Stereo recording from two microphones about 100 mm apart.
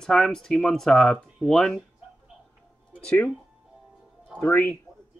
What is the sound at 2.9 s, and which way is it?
Speech, 10° left (ahead or behind).